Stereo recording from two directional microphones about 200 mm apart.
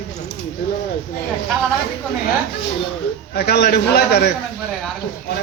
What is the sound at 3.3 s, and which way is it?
A man's voice, 50° left (ahead or behind).